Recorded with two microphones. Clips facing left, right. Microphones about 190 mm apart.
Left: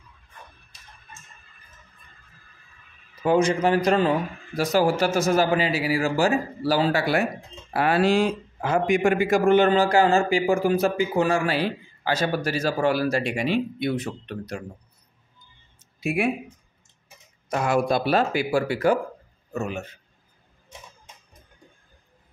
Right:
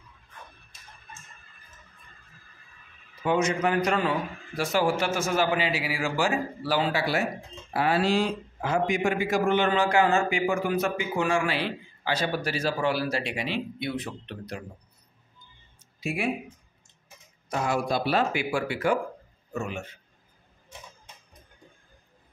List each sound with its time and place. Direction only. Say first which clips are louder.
3.3 s a man's voice: left 5 dB; 30° left (ahead or behind); by 9.7 s 50° left (ahead or behind)
9.7 s a man's voice: left 4 dB; 35° left (ahead or behind)
16.0 s speech: left 6 dB; 60° left (ahead or behind)
17.5 s a man's voice: left 5 dB; 55° left (ahead or behind); by 19.9 s 40° left (ahead or behind)